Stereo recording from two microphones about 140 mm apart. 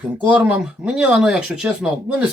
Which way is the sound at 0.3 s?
10° right (ahead or behind).